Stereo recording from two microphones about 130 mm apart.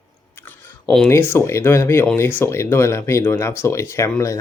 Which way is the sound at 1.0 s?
20° left (ahead or behind).